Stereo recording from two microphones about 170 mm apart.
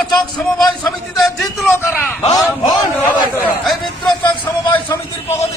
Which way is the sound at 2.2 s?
20° left (ahead or behind).